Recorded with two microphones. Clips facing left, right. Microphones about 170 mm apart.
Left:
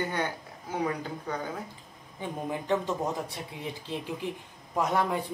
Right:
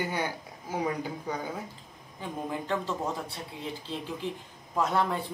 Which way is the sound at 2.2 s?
15° left (ahead or behind).